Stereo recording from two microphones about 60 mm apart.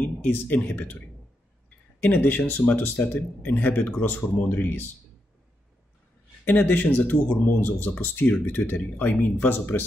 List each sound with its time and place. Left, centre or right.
0.0 s speech: left
2.0 s speech: left
6.4 s speech: left